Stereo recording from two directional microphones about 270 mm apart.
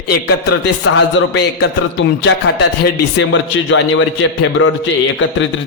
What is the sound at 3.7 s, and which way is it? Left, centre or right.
A man's voice, left.